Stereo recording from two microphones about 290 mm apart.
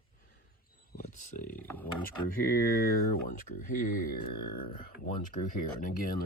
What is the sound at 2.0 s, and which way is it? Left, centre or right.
Speech, left.